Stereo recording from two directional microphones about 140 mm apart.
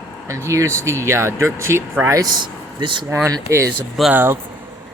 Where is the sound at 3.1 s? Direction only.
20° right (ahead or behind).